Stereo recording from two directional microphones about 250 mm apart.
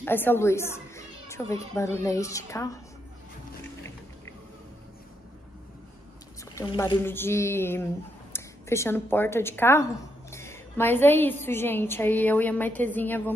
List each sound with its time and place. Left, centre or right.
0.0 s a woman's voice: centre
6.6 s speech: centre